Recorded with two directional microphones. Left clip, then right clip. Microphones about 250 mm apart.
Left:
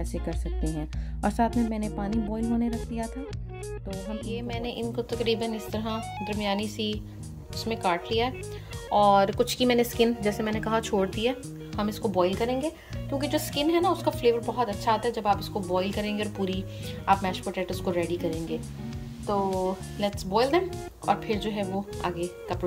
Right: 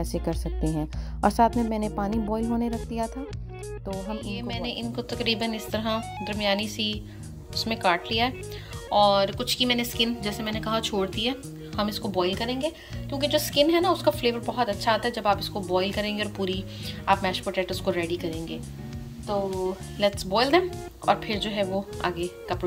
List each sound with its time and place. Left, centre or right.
0.0 s speech: centre
4.3 s speech: centre
20.0 s speech: centre